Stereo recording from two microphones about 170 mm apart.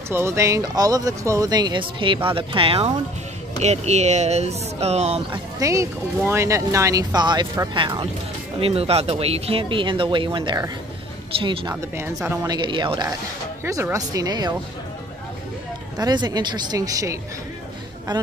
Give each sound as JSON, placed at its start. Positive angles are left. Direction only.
{"t": 0.1, "sound": "speech", "side_deg": -15}
{"t": 5.3, "sound": "speech", "side_deg": -20}
{"t": 11.7, "sound": "speech", "side_deg": -15}
{"t": 16.0, "sound": "speech", "side_deg": -25}